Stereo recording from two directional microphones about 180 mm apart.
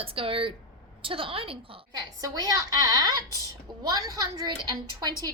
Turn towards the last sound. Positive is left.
turn(degrees=-25)  # may be behind; listen again after turning